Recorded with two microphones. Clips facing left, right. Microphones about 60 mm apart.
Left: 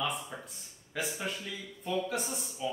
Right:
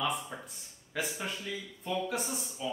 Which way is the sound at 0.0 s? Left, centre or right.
Centre.